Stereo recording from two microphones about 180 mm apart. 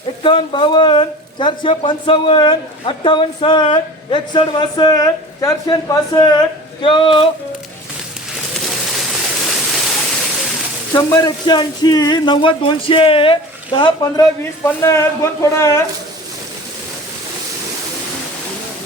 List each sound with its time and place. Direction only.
0.2 s speech: 25° left (ahead or behind)
9.6 s waterfall: centre (ahead or behind)
10.9 s speech: 20° left (ahead or behind)